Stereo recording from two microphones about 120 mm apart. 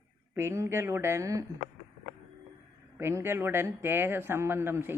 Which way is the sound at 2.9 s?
20° right (ahead or behind).